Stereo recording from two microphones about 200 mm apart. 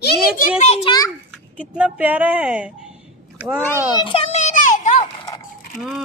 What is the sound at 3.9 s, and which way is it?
Children playing, 25° left (ahead or behind).